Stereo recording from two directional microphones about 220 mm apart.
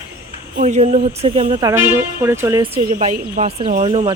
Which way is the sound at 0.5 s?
30° right (ahead or behind).